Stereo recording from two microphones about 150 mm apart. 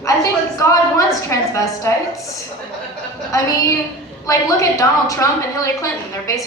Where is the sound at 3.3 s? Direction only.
20° left (ahead or behind).